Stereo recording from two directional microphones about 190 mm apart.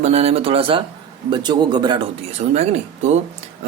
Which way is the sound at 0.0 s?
35° right (ahead or behind).